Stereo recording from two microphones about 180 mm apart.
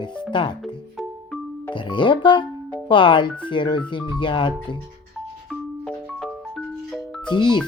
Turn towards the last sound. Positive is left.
turn(degrees=25)  # may be behind; listen again after turning